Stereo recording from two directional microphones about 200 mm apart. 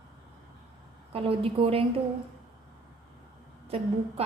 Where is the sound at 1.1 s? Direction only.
30° right (ahead or behind).